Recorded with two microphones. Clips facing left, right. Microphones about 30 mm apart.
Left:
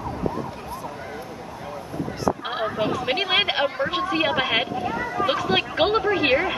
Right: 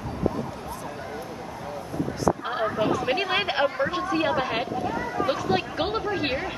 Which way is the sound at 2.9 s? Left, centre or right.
Left.